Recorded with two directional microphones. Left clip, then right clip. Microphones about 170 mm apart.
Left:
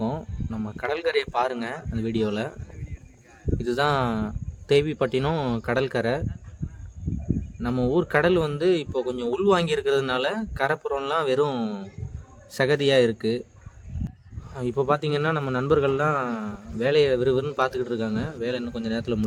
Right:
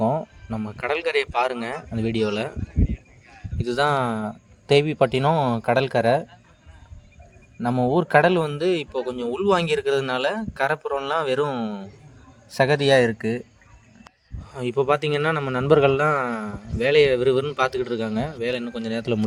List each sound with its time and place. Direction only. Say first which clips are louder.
0.0 s speech: right 8 dB; 20° right (ahead or behind)
3.6 s speech: right 2 dB; 20° right (ahead or behind)
7.6 s speech: right 3 dB; 20° right (ahead or behind)
14.5 s a man's voice: right 3 dB; 30° right (ahead or behind)